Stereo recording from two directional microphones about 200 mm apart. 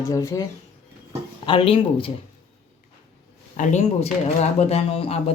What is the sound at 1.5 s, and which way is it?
Speech, 25° left (ahead or behind).